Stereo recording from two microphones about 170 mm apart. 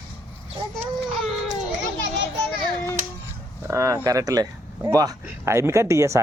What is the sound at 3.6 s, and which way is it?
Speech, 20° right (ahead or behind).